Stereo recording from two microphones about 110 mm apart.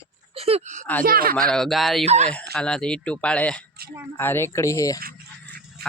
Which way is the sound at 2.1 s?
80° right.